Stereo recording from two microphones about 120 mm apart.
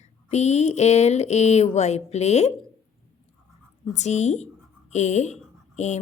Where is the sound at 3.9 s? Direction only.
75° left (ahead or behind).